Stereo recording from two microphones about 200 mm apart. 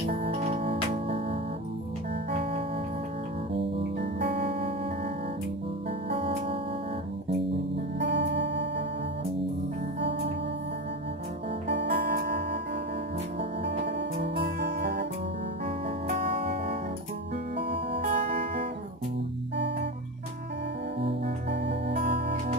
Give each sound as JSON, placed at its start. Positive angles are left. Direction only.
{"t": 0.0, "sound": "music", "side_deg": -30}
{"t": 4.5, "sound": "music", "side_deg": -25}
{"t": 7.9, "sound": "music", "side_deg": -60}
{"t": 10.0, "sound": "music", "side_deg": -60}
{"t": 11.7, "sound": "music", "side_deg": -55}
{"t": 16.3, "sound": "music", "side_deg": -30}
{"t": 19.5, "sound": "music", "side_deg": -60}
{"t": 21.2, "sound": "music", "side_deg": -60}